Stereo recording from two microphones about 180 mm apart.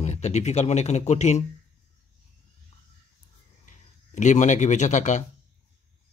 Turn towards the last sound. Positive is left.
turn(degrees=40)  # may be behind; listen again after turning